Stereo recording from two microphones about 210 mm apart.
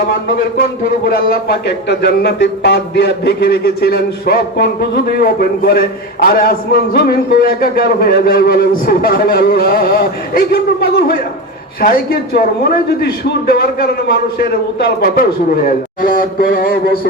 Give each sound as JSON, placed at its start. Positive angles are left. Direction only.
{"t": 1.0, "sound": "speech", "side_deg": 45}